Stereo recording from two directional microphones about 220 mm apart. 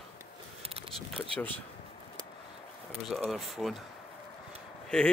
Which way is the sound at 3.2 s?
Centre (ahead or behind).